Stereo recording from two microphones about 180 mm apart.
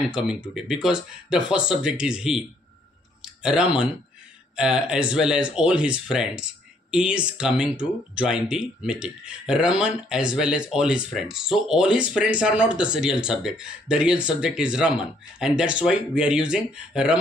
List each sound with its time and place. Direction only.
0.6 s speech: 5° right (ahead or behind)